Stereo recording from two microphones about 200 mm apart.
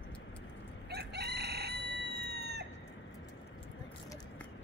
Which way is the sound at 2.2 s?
55° right (ahead or behind).